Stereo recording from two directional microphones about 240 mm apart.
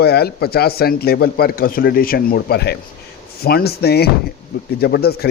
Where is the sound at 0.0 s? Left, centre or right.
Left.